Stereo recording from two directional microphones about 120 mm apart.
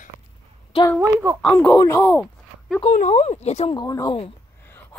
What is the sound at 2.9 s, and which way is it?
Speech, 80° left.